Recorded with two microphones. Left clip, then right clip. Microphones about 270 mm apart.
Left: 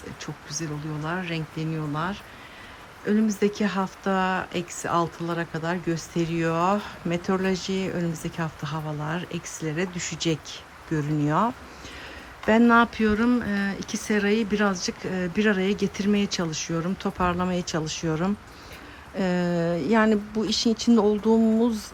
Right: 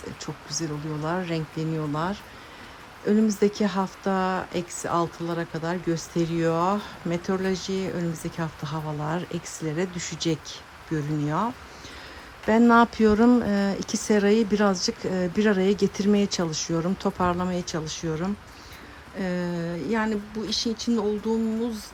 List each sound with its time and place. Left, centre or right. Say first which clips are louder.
0.2 s speech: right 2 dB; centre